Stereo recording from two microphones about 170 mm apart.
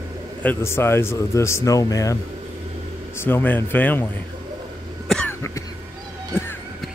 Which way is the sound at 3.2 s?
10° left (ahead or behind).